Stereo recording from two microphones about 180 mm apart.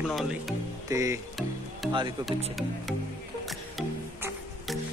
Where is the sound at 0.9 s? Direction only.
15° right (ahead or behind).